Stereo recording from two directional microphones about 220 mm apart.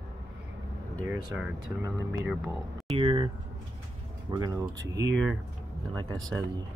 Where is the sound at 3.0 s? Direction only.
25° right (ahead or behind).